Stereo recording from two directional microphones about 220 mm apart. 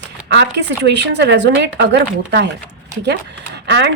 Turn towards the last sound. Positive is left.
turn(degrees=-50)  # may be behind; listen again after turning